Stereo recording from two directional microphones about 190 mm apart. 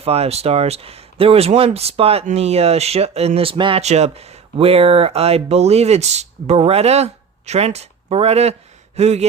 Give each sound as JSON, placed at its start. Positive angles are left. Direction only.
{"t": 0.0, "sound": "speech", "side_deg": -30}